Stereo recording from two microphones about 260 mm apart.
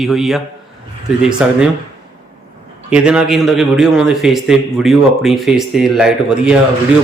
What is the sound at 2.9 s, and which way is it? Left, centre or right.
A man's voice, centre.